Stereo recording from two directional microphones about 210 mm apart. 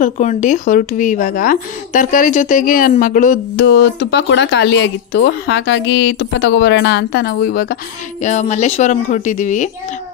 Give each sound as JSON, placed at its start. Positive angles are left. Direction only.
{"t": 0.0, "sound": "speech", "side_deg": 35}
{"t": 3.5, "sound": "a woman's voice", "side_deg": 55}